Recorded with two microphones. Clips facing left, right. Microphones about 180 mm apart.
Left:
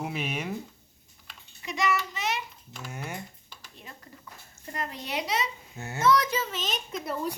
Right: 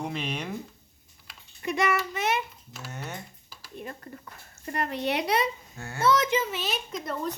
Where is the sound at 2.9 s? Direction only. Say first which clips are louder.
Left 1 dB; 10° left (ahead or behind).